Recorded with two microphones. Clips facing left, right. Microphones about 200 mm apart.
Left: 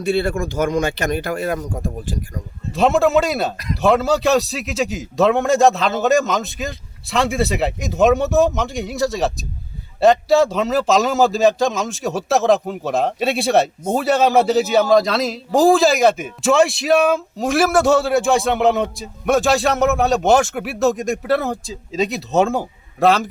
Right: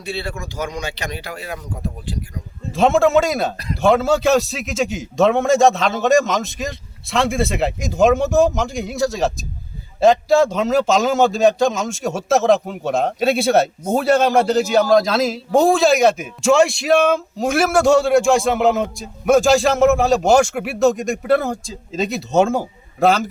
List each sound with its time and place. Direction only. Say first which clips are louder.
0.0 s speech: left 8 dB; 50° left (ahead or behind)
2.7 s a man's voice: right 1 dB; centre (ahead or behind)